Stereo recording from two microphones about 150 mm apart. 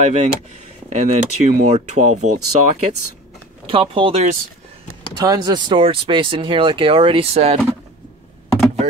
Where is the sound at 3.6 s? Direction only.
35° right (ahead or behind).